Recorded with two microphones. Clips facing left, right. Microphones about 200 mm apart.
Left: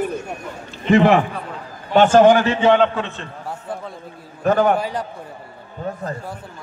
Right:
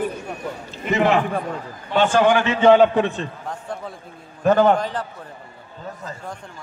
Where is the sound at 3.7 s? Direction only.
Centre (ahead or behind).